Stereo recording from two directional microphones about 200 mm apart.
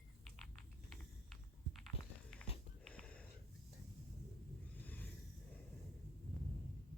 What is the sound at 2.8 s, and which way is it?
Wheeze, 5° left (ahead or behind).